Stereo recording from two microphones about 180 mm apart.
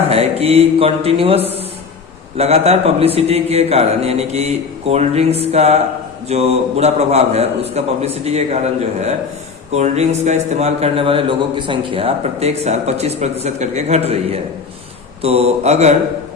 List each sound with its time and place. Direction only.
0.1 s a man's voice: 35° right (ahead or behind)
9.7 s a man's voice: 40° right (ahead or behind)
15.2 s a man's voice: 35° right (ahead or behind)